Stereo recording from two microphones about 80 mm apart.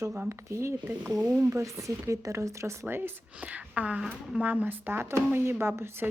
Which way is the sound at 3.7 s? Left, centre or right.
Centre.